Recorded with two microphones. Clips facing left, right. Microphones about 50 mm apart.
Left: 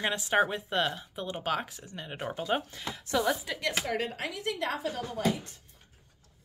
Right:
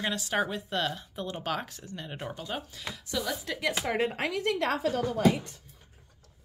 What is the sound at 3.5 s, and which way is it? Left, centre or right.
Speech, centre.